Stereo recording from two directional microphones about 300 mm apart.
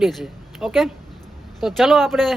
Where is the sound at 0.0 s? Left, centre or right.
Centre.